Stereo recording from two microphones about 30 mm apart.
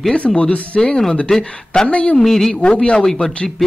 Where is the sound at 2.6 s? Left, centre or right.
Left.